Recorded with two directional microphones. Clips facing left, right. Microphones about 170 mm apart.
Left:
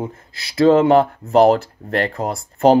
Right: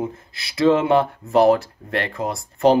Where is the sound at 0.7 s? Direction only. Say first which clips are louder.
Left 4 dB; 40° left (ahead or behind).